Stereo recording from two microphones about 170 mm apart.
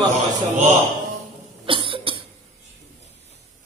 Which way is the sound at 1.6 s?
30° right (ahead or behind).